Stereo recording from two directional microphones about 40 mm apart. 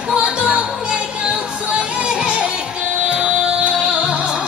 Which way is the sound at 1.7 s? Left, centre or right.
Right.